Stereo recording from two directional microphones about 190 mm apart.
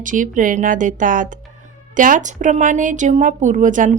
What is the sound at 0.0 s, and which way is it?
A woman's voice, 45° right (ahead or behind).